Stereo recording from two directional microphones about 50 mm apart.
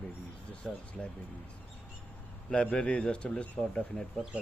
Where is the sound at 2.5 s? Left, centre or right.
Left.